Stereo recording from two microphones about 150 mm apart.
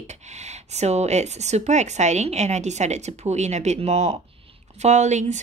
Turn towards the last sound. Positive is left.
turn(degrees=-50)  # may be behind; listen again after turning